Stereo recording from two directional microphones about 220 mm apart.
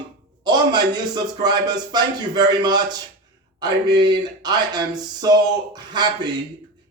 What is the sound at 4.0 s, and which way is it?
Speech, 20° right (ahead or behind).